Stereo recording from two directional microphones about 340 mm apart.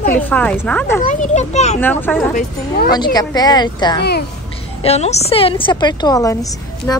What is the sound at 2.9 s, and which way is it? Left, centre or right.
Speech, centre.